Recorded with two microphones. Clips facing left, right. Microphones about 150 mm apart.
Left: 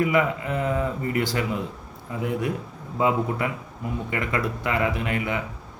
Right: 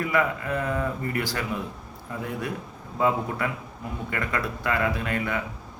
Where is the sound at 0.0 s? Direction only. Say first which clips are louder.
Left 3 dB; 20° left (ahead or behind).